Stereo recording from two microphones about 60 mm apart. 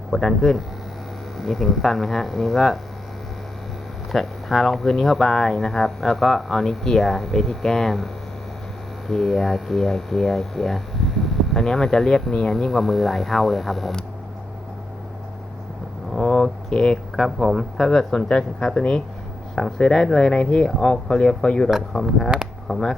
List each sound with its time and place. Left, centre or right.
0.1 s speech: centre
4.1 s speech: centre
16.1 s a sound: centre
17.3 s speech: centre